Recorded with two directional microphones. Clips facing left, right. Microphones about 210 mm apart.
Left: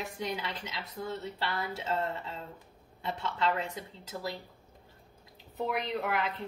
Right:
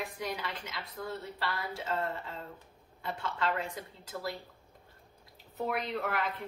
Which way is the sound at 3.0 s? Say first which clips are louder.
Left 2 dB; 25° left (ahead or behind).